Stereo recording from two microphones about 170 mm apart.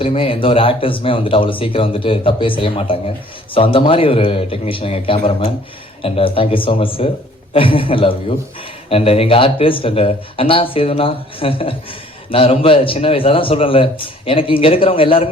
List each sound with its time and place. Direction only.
0.0 s speech: 35° left (ahead or behind)